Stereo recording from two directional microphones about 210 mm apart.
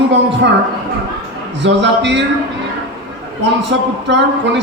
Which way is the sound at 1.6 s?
55° right (ahead or behind).